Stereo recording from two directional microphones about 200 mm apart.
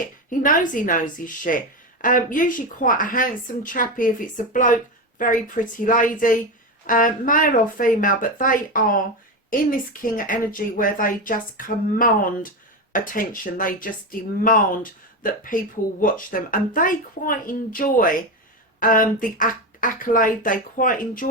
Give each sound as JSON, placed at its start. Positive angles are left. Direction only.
{"t": 0.3, "sound": "a woman's voice", "side_deg": 40}